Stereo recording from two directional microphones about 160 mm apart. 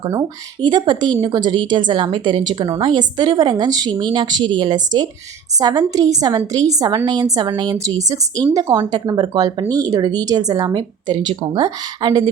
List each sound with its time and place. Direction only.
0.0 s a woman's voice: 25° right (ahead or behind)